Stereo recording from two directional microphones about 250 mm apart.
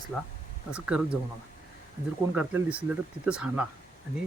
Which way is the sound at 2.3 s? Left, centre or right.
Centre.